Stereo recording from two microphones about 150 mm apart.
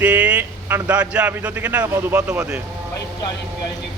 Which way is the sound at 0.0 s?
10° right (ahead or behind).